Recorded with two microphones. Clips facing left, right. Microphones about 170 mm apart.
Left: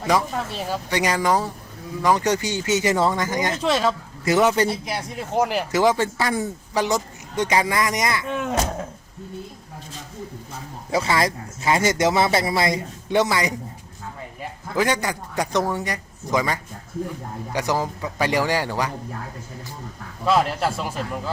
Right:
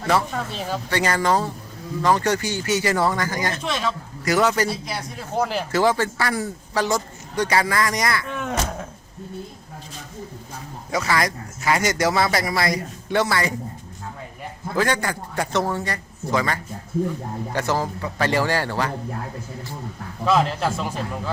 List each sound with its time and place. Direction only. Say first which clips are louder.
0.0 s a man's voice: even; 15° left (ahead or behind)
3.6 s speech: left 5 dB; 40° left (ahead or behind)
4.3 s speech: left 2 dB; 20° left (ahead or behind)
10.9 s speech: left 1 dB; 25° left (ahead or behind)
14.8 s a man's voice: even; 15° left (ahead or behind)
20.2 s a man's voice: even; 5° left (ahead or behind)